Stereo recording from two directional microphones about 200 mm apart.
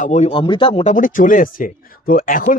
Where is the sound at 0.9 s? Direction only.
45° left (ahead or behind).